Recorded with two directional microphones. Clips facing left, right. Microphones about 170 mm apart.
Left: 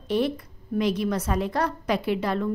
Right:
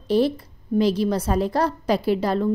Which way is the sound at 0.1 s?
35° right (ahead or behind).